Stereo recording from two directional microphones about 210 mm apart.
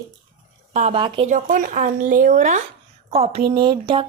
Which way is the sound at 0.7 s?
30° right (ahead or behind).